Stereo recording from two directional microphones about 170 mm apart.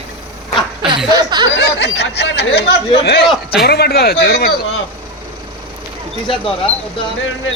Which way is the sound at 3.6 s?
70° left (ahead or behind).